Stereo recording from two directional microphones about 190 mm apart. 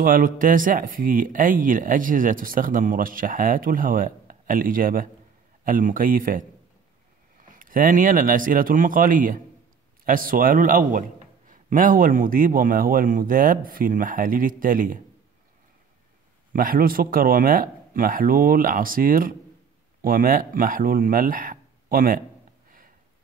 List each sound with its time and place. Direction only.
0.0 s speech: 45° right (ahead or behind)
16.5 s speech: 50° right (ahead or behind)